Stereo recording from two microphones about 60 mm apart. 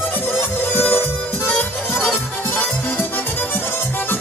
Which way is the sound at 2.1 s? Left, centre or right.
Left.